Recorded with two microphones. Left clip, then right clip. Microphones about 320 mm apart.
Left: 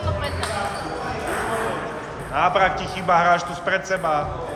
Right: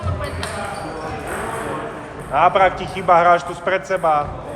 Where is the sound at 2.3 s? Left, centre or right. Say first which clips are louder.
Right 4 dB; right.